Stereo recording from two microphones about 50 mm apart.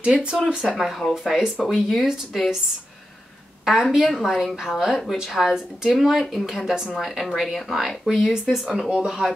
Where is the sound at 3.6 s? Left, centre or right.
Centre.